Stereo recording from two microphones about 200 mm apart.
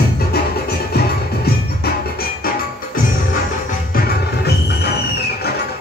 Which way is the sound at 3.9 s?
50° left (ahead or behind).